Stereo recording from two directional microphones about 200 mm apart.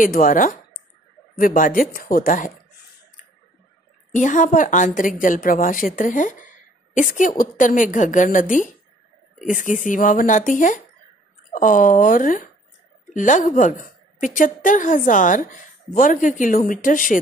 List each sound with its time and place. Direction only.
0.0 s a woman's voice: 45° left (ahead or behind)
4.1 s a woman's voice: 40° left (ahead or behind)